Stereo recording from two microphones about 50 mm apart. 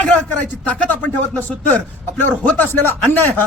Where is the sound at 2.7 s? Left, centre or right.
Left.